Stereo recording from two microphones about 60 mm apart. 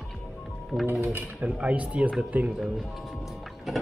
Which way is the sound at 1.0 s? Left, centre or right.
Right.